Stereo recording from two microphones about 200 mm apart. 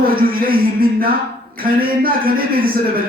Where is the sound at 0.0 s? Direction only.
45° right (ahead or behind).